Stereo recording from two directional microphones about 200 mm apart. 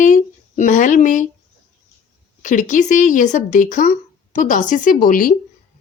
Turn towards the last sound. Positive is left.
turn(degrees=45)  # may be behind; listen again after turning